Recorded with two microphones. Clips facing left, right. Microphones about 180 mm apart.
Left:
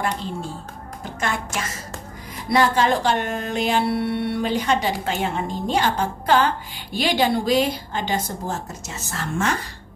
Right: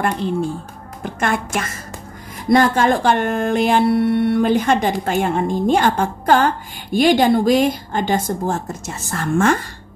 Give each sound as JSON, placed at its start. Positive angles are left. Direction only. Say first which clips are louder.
{"t": 0.0, "sound": "a woman's voice", "louder": "right 7 dB", "side_deg": -55}